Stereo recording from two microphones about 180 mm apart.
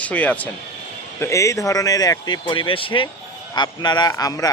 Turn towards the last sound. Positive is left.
turn(degrees=20)  # may be behind; listen again after turning